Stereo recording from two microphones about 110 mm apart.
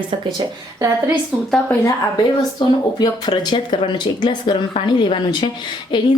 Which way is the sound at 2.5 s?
40° left (ahead or behind).